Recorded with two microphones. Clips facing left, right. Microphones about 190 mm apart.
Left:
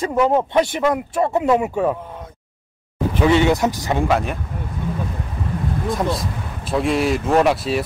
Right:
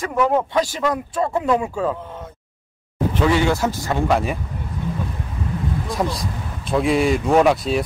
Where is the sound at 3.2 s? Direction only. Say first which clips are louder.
Left 3 dB; 20° left (ahead or behind).